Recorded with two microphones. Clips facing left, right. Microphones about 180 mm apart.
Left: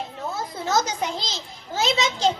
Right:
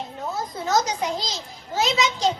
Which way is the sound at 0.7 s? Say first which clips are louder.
Right 1 dB; 25° left (ahead or behind).